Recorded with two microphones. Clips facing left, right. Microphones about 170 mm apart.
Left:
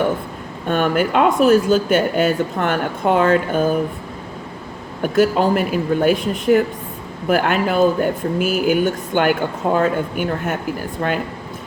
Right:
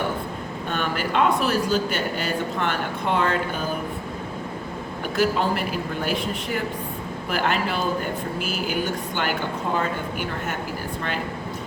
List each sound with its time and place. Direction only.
0.7 s speech: 50° left (ahead or behind)
5.1 s speech: 45° left (ahead or behind)